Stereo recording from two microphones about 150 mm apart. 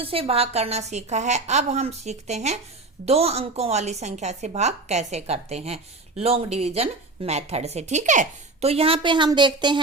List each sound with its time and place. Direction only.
0.0 s a woman's voice: 40° right (ahead or behind)